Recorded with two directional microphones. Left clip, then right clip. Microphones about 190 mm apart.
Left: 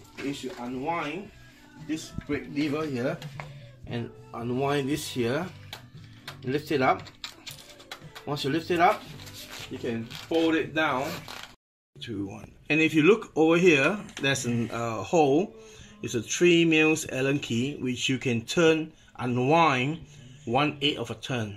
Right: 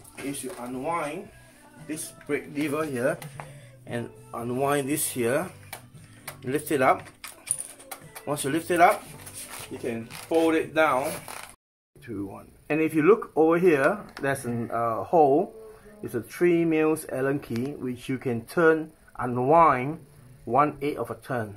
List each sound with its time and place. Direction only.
0.9 s speech: 15° right (ahead or behind)
2.2 s speech: 15° right (ahead or behind)
4.5 s speech: 15° right (ahead or behind)
8.3 s speech: 15° right (ahead or behind)
9.7 s speech: centre (ahead or behind)
11.1 s speech: 15° left (ahead or behind)